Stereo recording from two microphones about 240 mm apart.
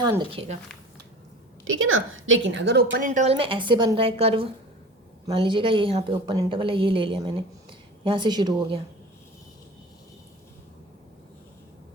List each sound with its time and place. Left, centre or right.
0.0 s a woman's voice: centre
1.6 s a woman's voice: right
3.1 s a woman's voice: right